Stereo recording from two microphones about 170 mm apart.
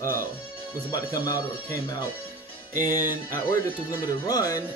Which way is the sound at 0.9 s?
20° left (ahead or behind).